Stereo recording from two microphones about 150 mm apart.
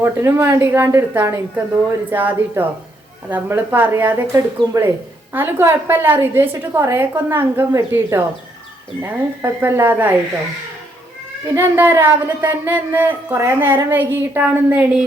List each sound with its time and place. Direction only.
0.0 s speech: 15° right (ahead or behind)
11.4 s speech: 15° right (ahead or behind)